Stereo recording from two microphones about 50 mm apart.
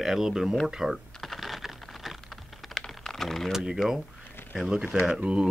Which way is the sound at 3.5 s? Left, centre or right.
Centre.